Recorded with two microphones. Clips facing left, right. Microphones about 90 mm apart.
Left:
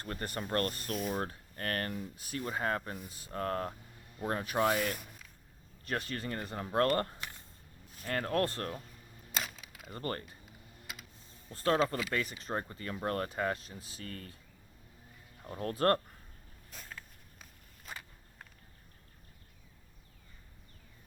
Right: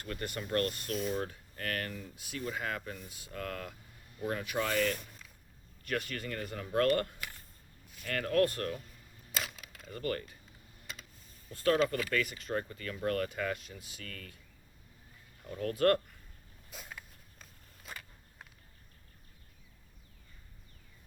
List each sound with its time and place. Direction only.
0.0 s speech: 35° left (ahead or behind)
4.8 s speech: 10° left (ahead or behind)
5.8 s speech: 30° left (ahead or behind)
9.4 s camera: centre (ahead or behind)
9.9 s speech: 30° left (ahead or behind)
10.9 s typing: 10° left (ahead or behind)
11.5 s speech: 25° left (ahead or behind)
12.2 s speech: 35° left (ahead or behind)
15.4 s speech: 35° left (ahead or behind)
16.7 s a sound: 10° right (ahead or behind)